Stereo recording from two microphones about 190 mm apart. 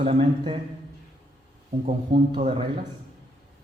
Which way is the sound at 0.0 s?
30° right (ahead or behind).